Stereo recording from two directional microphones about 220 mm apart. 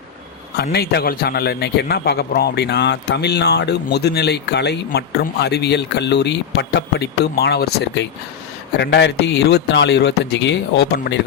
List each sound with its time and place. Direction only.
0.5 s a man's voice: 45° left (ahead or behind)